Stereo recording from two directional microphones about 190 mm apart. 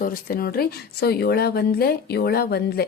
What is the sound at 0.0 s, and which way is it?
Speech, 50° left (ahead or behind).